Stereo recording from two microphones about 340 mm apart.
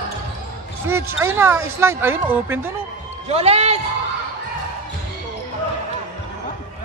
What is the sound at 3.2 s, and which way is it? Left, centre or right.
Speech, centre.